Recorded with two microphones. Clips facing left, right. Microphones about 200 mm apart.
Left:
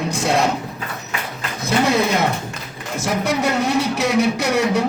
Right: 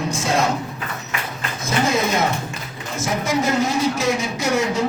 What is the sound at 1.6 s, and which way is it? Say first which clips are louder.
Speech: left 3 dB; 65° left (ahead or behind).